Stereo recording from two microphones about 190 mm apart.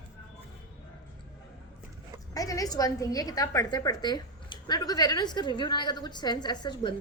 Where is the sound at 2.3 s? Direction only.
20° left (ahead or behind).